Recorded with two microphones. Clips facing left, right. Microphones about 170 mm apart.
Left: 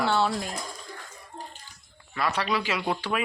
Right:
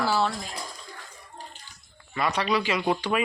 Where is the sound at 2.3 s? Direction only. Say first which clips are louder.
Right 2 dB; 5° left (ahead or behind).